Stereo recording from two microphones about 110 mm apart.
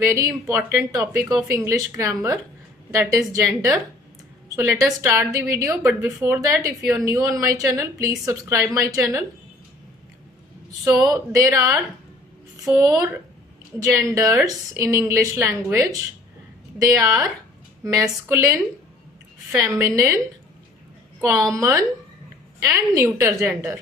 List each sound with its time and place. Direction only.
0.4 s a woman's voice: 25° right (ahead or behind)
11.0 s a woman's voice: 30° right (ahead or behind)
19.6 s a woman's voice: 25° right (ahead or behind)
21.2 s a woman's voice: 25° right (ahead or behind)